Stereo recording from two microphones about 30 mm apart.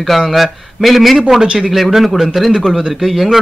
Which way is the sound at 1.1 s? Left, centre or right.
Centre.